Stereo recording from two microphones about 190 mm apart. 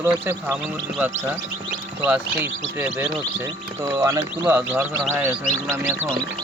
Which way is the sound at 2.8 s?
5° right (ahead or behind).